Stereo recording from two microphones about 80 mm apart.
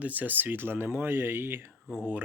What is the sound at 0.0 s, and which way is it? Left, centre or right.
Speech, right.